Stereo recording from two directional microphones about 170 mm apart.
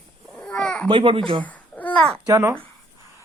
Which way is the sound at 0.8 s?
30° right (ahead or behind).